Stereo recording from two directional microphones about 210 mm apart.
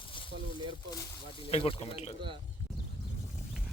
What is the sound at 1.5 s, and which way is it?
Speech, 25° left (ahead or behind).